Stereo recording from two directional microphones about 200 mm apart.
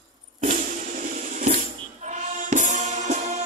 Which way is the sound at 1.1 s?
40° right (ahead or behind).